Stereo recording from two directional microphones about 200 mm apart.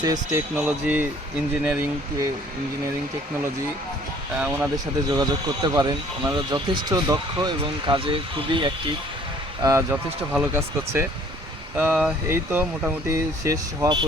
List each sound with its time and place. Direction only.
0.0 s speech: 15° right (ahead or behind)
4.4 s speech: 10° right (ahead or behind)
5.0 s speech: 20° right (ahead or behind)